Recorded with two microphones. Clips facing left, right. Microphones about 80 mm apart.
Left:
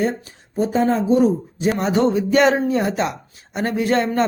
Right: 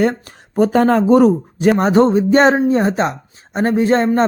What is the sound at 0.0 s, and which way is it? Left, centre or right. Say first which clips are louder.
Speech: right 5 dB; right.